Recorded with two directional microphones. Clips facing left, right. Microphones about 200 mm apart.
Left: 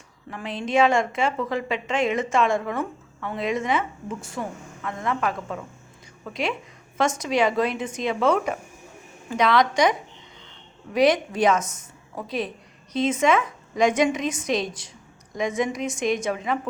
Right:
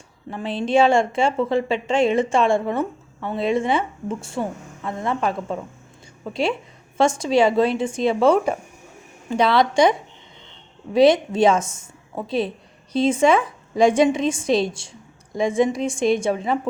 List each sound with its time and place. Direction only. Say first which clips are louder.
0.3 s a woman's voice: right 5 dB; 30° right (ahead or behind)
10.9 s a woman's voice: right 5 dB; 25° right (ahead or behind)